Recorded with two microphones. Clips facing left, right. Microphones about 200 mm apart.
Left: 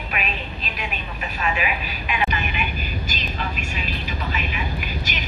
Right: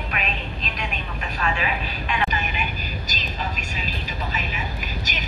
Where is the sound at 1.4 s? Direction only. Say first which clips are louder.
Left 1 dB; 15° left (ahead or behind).